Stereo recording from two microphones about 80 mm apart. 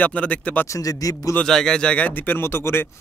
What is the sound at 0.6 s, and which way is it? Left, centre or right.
Speech, left.